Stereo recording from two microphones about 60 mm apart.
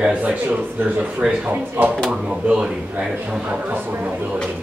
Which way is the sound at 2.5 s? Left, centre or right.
Centre.